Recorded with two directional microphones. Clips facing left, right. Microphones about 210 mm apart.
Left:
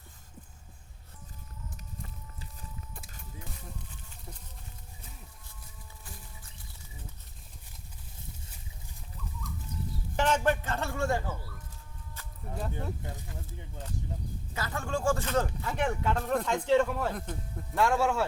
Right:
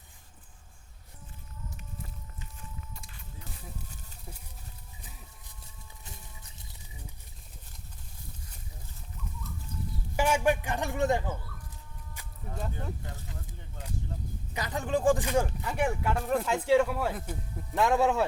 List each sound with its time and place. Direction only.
6.1 s music: 20° right (ahead or behind)
10.2 s speech: 10° right (ahead or behind)
12.2 s a sound: 15° right (ahead or behind)
12.5 s speech: centre (ahead or behind)
14.5 s speech: 15° right (ahead or behind)